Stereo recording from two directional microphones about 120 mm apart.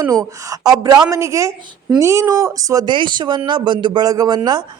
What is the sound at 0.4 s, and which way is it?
A man's voice, 30° right (ahead or behind).